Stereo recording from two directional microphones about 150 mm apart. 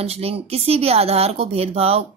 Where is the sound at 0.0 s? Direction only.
40° right (ahead or behind).